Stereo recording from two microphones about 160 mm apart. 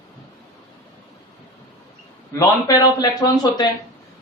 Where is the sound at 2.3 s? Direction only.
25° left (ahead or behind).